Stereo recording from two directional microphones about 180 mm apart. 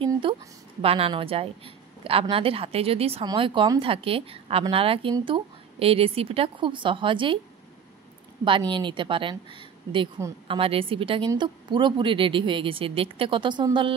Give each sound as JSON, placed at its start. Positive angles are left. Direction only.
{"t": 0.0, "sound": "a sound", "side_deg": -30}
{"t": 0.8, "sound": "a woman's voice", "side_deg": -30}
{"t": 8.5, "sound": "speech", "side_deg": -25}